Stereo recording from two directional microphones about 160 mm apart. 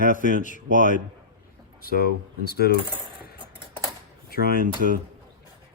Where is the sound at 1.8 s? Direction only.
70° left (ahead or behind).